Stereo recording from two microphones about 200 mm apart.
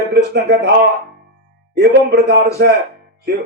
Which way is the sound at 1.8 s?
55° right (ahead or behind).